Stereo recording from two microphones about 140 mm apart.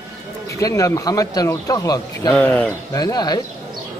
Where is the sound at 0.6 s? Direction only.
25° left (ahead or behind).